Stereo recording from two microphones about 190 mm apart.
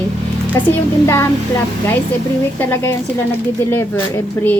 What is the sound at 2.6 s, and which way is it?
Speech, 10° left (ahead or behind).